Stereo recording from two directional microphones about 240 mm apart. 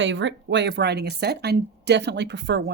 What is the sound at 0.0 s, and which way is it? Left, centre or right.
A woman's voice, right.